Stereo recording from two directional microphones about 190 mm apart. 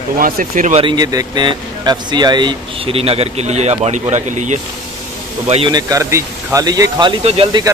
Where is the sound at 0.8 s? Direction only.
25° right (ahead or behind); by 4.6 s 40° right (ahead or behind).